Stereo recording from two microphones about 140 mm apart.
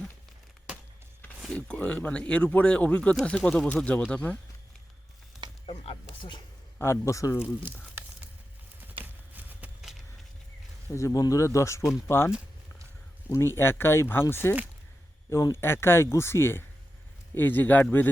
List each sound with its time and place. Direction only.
1.5 s speech: 5° left (ahead or behind)
5.6 s speech: 40° left (ahead or behind)
6.7 s speech: 20° left (ahead or behind)
9.3 s a sound: 10° right (ahead or behind)
10.9 s speech: 25° left (ahead or behind)